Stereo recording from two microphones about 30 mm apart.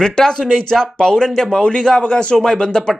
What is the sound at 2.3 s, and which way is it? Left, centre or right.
Speech, centre.